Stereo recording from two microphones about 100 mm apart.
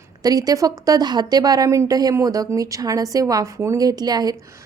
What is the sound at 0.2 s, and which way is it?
A woman's voice, 40° right (ahead or behind).